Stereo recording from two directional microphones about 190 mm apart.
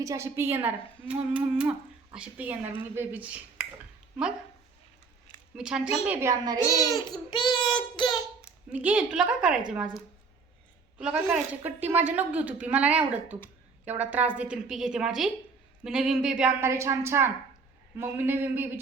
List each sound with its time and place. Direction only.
0.0 s a woman's voice: 15° right (ahead or behind)
5.5 s a woman's voice: 5° right (ahead or behind)
6.7 s a child's voice: 20° left (ahead or behind)
8.7 s a woman's voice: 5° right (ahead or behind)